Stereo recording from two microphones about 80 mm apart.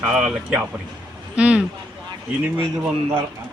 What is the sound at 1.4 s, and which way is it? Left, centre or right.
Speech, centre.